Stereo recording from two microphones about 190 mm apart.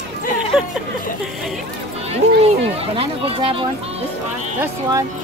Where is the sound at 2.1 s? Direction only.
35° right (ahead or behind).